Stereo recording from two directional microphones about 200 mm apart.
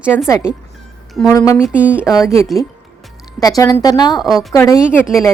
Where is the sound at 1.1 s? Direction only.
Centre (ahead or behind).